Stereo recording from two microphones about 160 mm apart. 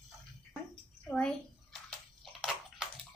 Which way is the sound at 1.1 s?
5° left (ahead or behind).